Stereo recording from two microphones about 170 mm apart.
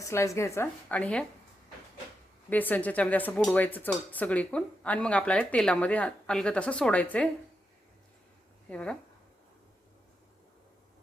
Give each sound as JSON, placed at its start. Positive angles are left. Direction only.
{"t": 0.0, "sound": "speech", "side_deg": 15}
{"t": 2.5, "sound": "speech", "side_deg": 10}
{"t": 8.7, "sound": "speech", "side_deg": 5}